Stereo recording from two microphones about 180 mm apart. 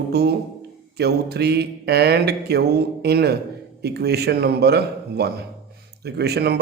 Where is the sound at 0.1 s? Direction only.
65° right (ahead or behind).